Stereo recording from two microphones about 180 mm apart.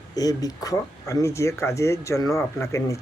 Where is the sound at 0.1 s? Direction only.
20° left (ahead or behind).